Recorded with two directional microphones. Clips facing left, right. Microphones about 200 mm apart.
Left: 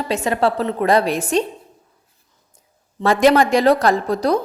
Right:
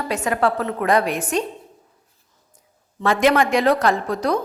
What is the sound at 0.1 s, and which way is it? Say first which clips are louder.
A woman's voice: left 2 dB; 30° left (ahead or behind).